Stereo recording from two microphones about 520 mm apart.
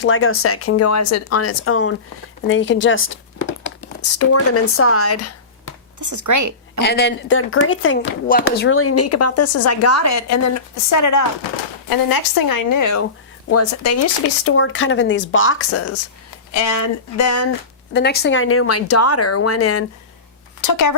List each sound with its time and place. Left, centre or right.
0.0 s speech: left
6.0 s a woman's voice: right
6.8 s a woman's voice: centre
17.9 s a woman's voice: centre; by 20.9 s left